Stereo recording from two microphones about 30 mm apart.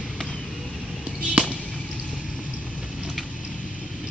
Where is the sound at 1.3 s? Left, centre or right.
Right.